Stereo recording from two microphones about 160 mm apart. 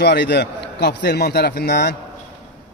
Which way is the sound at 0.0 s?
90° left.